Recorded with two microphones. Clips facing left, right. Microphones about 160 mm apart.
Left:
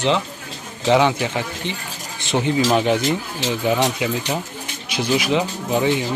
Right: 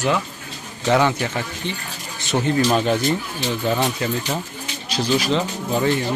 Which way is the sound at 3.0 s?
90° left.